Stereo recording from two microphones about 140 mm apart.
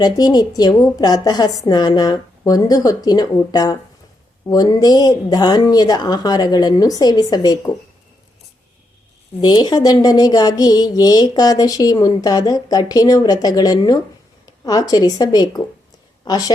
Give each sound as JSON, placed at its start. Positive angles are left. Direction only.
{"t": 0.0, "sound": "speech", "side_deg": 30}
{"t": 9.4, "sound": "a woman's voice", "side_deg": 30}